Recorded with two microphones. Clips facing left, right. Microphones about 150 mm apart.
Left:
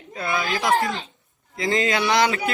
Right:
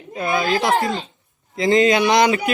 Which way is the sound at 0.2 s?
20° right (ahead or behind).